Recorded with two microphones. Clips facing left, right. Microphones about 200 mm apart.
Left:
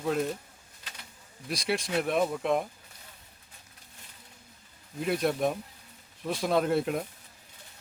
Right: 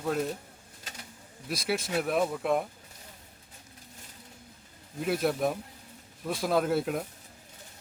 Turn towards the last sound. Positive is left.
turn(degrees=0)  # may be behind; listen again after turning